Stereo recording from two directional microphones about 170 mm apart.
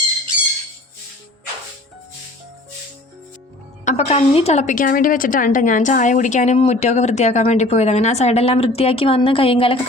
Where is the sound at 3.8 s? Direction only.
40° left (ahead or behind).